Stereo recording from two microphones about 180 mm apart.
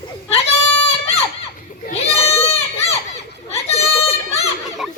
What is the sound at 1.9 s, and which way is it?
Goat, 35° left (ahead or behind).